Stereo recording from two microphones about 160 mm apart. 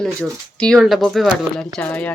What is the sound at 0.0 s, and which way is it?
Speech, 5° left (ahead or behind).